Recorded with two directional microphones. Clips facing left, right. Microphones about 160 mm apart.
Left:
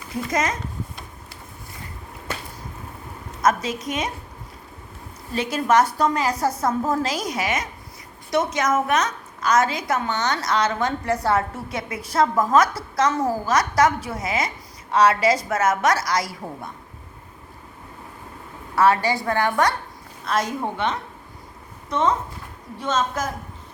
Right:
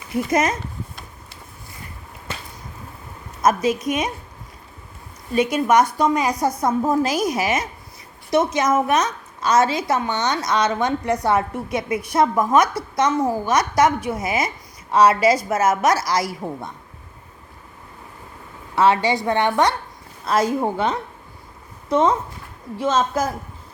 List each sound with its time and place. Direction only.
0.3 s a woman's voice: 25° right (ahead or behind)
3.8 s a woman's voice: 20° right (ahead or behind)
5.3 s a woman's voice: 15° right (ahead or behind)
18.8 s a woman's voice: 25° right (ahead or behind)